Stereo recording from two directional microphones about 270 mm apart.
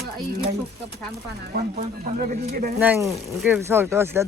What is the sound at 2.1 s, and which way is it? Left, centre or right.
Speech, right.